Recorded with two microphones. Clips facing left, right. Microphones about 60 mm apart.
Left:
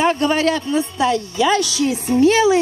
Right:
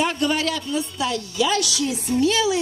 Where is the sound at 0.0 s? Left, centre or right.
Left.